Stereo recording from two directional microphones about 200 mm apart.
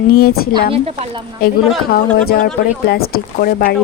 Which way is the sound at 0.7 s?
30° right (ahead or behind).